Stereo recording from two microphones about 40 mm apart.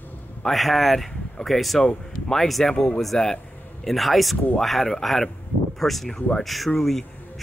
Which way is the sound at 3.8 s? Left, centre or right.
Centre.